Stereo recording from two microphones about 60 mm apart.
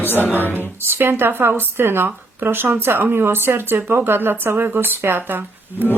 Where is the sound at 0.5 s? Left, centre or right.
Right.